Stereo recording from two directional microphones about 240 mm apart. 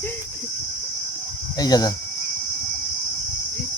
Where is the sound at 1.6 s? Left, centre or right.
Centre.